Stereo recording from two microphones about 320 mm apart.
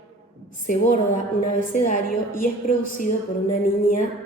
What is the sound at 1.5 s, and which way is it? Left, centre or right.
A woman's voice, left.